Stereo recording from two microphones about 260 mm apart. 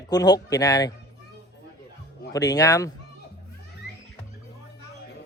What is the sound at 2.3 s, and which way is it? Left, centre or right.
Speech, centre.